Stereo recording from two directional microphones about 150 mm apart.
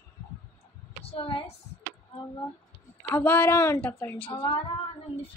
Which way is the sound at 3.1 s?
15° left (ahead or behind).